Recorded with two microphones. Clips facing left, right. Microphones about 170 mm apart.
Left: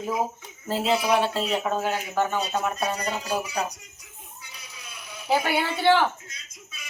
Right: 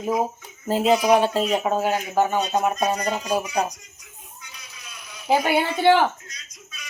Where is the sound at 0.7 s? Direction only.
15° right (ahead or behind).